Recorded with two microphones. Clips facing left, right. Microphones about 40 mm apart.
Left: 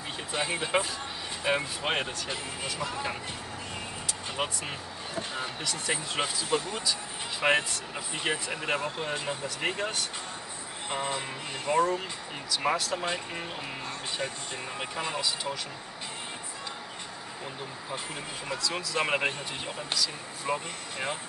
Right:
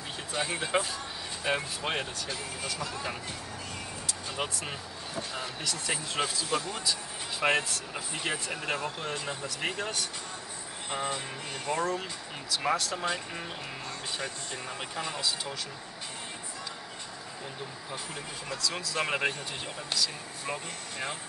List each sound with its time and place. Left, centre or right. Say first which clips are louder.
0.3 s speech: left 1 dB; centre
4.4 s speech: left 2 dB; centre
18.5 s speech: left 2 dB; left
20.4 s speech: left 5 dB; centre